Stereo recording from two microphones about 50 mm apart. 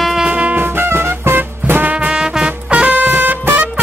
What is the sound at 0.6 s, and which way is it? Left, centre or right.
Music, right.